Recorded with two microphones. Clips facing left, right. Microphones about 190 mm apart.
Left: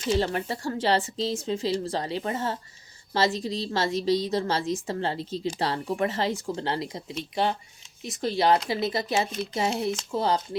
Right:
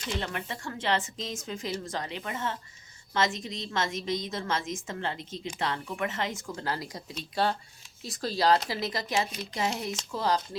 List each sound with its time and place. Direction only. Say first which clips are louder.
0.1 s a woman's voice: left 9 dB; 35° left (ahead or behind)
8.0 s speech: left 3 dB; 20° left (ahead or behind)